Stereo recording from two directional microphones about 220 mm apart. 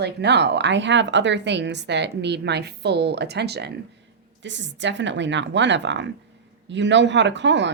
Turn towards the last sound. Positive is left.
turn(degrees=-55)  # may be behind; listen again after turning